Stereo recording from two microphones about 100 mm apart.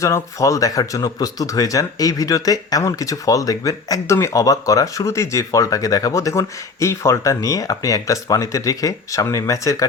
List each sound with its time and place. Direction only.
0.0 s speech: 35° left (ahead or behind)